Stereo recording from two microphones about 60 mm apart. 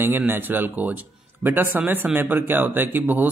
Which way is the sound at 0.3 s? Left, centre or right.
Right.